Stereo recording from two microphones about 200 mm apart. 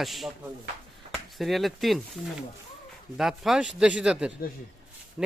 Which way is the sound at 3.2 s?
Centre (ahead or behind).